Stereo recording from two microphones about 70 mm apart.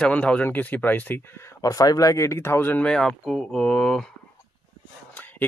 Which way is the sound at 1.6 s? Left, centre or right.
Left.